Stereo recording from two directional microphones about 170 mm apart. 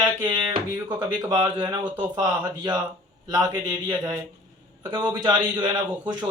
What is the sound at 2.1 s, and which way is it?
Speech, 25° right (ahead or behind).